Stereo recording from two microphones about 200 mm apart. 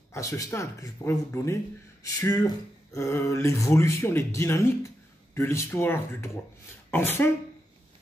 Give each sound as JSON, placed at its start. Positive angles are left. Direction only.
{"t": 0.1, "sound": "speech", "side_deg": 15}